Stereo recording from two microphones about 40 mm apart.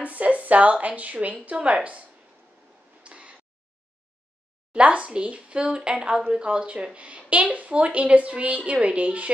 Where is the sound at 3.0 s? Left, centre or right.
Right.